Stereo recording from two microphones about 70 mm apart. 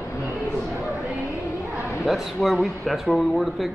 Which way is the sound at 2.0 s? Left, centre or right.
Centre.